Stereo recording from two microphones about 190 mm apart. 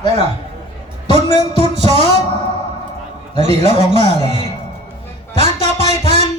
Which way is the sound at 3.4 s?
35° right (ahead or behind).